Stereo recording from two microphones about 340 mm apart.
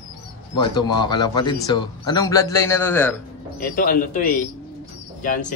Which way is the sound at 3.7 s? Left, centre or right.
Left.